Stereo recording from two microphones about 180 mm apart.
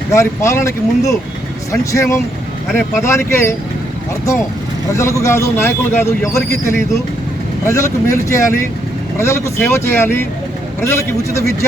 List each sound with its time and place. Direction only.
0.1 s a man's voice: 15° left (ahead or behind)
4.9 s a man's voice: 15° left (ahead or behind)